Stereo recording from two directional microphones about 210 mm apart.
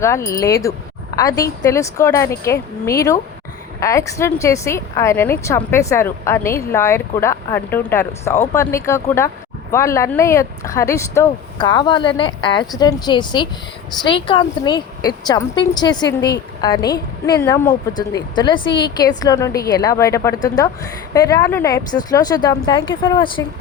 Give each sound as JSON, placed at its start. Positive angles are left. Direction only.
{"t": 0.0, "sound": "a woman's voice", "side_deg": 15}